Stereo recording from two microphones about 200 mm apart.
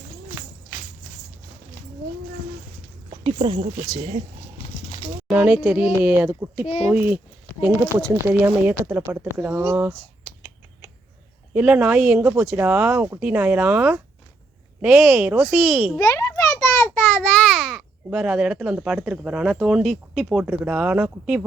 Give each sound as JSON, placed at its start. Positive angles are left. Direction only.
{"t": 3.1, "sound": "speech", "side_deg": -25}
{"t": 5.3, "sound": "speech", "side_deg": -5}
{"t": 11.5, "sound": "speech", "side_deg": -5}
{"t": 16.0, "sound": "a sound", "side_deg": 15}
{"t": 17.7, "sound": "speech", "side_deg": 0}